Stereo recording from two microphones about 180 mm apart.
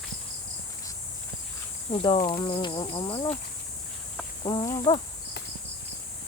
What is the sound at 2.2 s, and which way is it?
Insect, 50° left (ahead or behind).